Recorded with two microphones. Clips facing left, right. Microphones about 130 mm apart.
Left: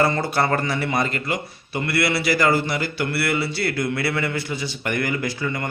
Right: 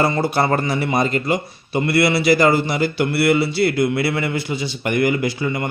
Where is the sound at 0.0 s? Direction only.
15° right (ahead or behind).